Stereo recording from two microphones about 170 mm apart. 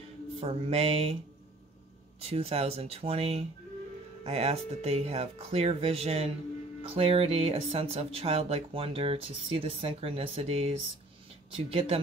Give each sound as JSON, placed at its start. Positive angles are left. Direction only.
{"t": 0.4, "sound": "speech", "side_deg": -35}
{"t": 2.2, "sound": "speech", "side_deg": -35}